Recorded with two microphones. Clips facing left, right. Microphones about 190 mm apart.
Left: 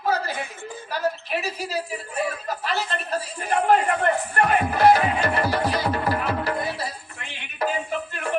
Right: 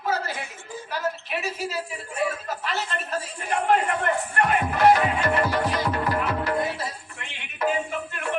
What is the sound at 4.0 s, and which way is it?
Music, 40° left (ahead or behind).